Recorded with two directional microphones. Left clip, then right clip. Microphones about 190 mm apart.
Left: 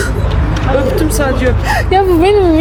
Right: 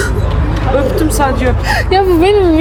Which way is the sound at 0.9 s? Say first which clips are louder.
Right 1 dB; 35° right (ahead or behind).